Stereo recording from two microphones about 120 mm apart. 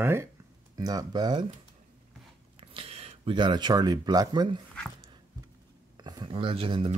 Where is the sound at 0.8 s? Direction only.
30° right (ahead or behind).